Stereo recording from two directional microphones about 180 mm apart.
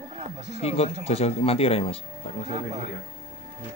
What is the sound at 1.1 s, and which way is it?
Speech, 35° left (ahead or behind).